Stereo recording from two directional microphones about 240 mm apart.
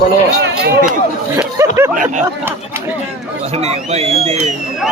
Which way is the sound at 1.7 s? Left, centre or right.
Centre.